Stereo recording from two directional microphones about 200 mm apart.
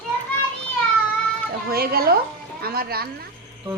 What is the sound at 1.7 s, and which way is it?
A woman's voice, 50° right (ahead or behind).